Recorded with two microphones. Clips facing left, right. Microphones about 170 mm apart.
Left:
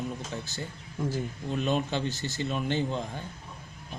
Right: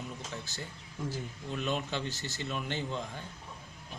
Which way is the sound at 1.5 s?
30° left (ahead or behind).